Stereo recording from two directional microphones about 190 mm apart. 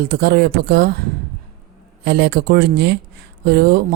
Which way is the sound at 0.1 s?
60° right (ahead or behind).